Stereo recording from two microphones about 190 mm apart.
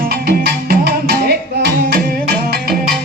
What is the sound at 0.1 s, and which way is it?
Music, 55° right (ahead or behind).